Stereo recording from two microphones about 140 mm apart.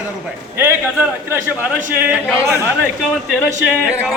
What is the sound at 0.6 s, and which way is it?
Speech, 15° right (ahead or behind).